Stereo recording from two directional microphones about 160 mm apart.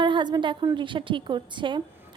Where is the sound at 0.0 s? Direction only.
30° right (ahead or behind).